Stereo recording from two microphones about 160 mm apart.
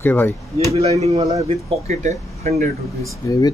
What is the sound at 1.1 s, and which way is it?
Speech, 20° right (ahead or behind).